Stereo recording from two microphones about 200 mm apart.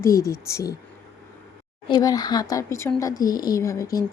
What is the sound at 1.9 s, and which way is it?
Speech, 20° left (ahead or behind).